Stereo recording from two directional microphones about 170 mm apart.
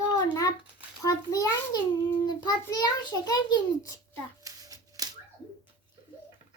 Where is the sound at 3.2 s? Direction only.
25° left (ahead or behind).